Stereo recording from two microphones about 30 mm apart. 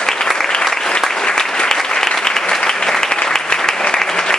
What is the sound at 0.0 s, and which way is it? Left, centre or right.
Applause, left.